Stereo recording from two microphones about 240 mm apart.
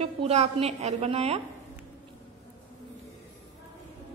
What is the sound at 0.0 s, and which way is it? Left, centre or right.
A woman's voice, right.